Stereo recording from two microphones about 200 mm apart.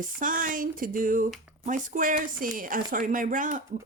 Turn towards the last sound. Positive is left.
turn(degrees=-40)  # may be behind; listen again after turning